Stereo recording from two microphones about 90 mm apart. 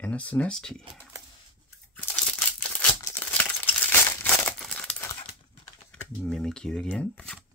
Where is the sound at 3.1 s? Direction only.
20° left (ahead or behind).